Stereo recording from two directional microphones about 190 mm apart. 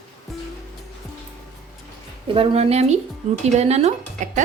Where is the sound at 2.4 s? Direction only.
30° right (ahead or behind).